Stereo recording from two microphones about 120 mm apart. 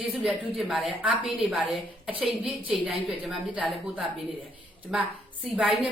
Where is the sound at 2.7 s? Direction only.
5° right (ahead or behind).